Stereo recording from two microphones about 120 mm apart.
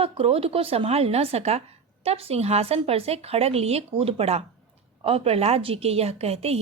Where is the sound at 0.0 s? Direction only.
55° right (ahead or behind).